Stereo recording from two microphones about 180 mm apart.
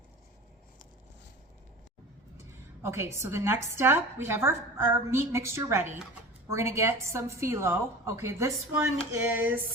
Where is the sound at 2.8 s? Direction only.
15° right (ahead or behind).